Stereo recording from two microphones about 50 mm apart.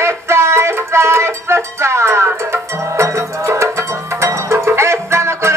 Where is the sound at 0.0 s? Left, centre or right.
Right.